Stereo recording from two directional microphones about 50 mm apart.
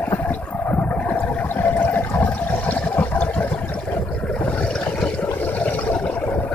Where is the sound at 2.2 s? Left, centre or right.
Left.